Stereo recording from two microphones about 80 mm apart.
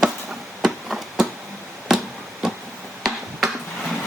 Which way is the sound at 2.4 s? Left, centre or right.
Centre.